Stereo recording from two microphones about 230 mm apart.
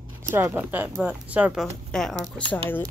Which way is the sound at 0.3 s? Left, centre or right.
Centre.